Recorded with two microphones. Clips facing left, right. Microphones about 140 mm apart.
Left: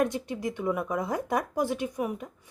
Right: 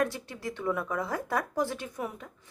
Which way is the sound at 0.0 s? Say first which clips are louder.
Left 3 dB; 20° left (ahead or behind).